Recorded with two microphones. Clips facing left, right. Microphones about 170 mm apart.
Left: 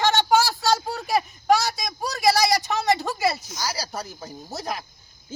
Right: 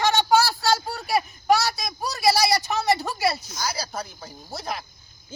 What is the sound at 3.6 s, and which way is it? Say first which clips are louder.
A woman's voice: even; 35° left (ahead or behind).